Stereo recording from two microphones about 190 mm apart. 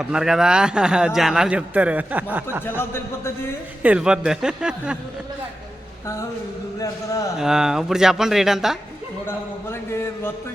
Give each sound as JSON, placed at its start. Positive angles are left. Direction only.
{"t": 0.0, "sound": "speech", "side_deg": -5}
{"t": 2.6, "sound": "a man's voice", "side_deg": 10}
{"t": 3.8, "sound": "speech", "side_deg": -5}
{"t": 6.7, "sound": "a man's voice", "side_deg": 15}
{"t": 7.3, "sound": "speech", "side_deg": -5}
{"t": 9.2, "sound": "a man's voice", "side_deg": 15}